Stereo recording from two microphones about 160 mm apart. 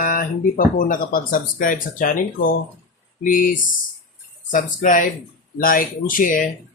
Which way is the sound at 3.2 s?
60° left (ahead or behind).